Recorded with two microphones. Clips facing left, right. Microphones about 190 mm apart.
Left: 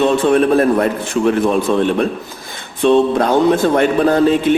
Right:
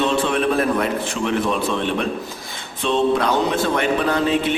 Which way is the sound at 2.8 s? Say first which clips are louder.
Left 6 dB; 50° left (ahead or behind).